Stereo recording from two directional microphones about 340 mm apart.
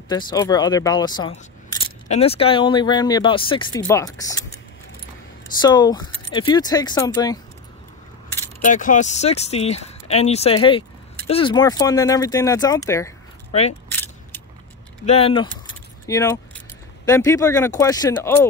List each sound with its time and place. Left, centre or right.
0.1 s speech: centre
5.6 s speech: centre
8.5 s speech: left
13.8 s keys jangling: centre
15.0 s speech: centre